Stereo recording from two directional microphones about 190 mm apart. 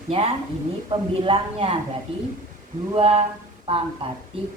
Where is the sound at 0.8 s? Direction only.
30° right (ahead or behind).